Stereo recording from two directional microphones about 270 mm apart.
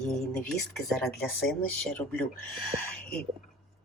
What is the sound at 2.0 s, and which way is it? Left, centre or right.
Speech, centre.